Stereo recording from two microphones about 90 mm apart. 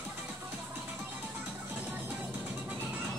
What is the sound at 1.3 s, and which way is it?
Music, 15° right (ahead or behind).